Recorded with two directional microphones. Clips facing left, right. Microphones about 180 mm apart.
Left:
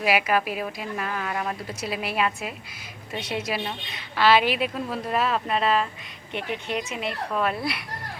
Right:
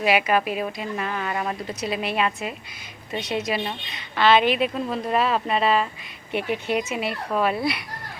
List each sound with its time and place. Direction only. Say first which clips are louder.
0.0 s a woman's voice: right 2 dB; 5° left (ahead or behind)